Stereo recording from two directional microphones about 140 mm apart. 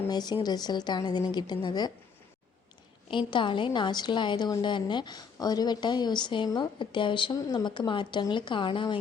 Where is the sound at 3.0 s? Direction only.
35° left (ahead or behind).